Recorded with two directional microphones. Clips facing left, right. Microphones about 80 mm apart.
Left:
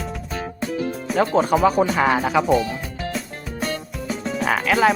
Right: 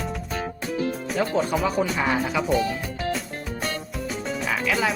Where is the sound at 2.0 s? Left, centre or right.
Left.